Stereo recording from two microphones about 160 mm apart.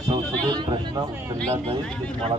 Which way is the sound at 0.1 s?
30° right (ahead or behind).